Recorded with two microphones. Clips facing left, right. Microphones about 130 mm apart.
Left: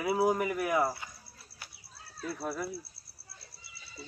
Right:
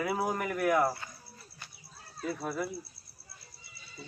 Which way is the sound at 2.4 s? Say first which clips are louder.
Even; 5° left (ahead or behind).